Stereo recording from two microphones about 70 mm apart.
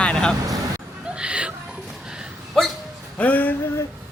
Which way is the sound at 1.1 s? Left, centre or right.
Centre.